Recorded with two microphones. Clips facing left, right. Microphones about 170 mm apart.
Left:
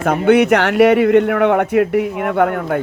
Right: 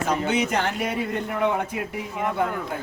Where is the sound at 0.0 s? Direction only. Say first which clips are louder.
Left 11 dB; 60° left (ahead or behind).